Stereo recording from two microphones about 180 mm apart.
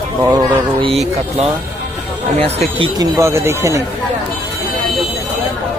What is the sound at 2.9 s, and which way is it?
Speech, 15° right (ahead or behind).